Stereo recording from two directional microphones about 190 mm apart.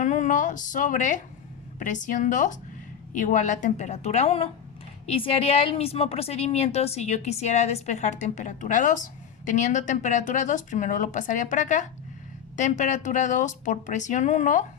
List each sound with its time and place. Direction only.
0.0 s a woman's voice: 40° left (ahead or behind)